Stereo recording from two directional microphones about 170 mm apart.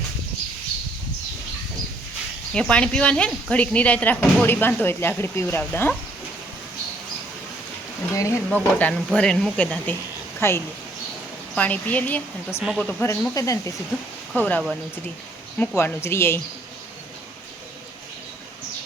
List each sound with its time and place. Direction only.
2.5 s speech: 5° left (ahead or behind)
8.1 s speech: 20° left (ahead or behind)
8.4 s speech: 5° left (ahead or behind)